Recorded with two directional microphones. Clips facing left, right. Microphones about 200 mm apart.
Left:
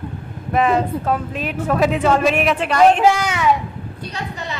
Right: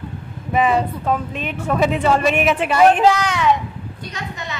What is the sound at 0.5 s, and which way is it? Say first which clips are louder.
A woman's voice: left 1 dB; centre (ahead or behind).